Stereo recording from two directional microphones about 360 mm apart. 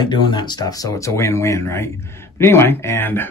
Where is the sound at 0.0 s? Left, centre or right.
Centre.